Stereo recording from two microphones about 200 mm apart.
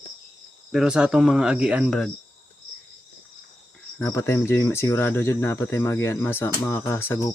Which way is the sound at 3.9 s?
15° left (ahead or behind).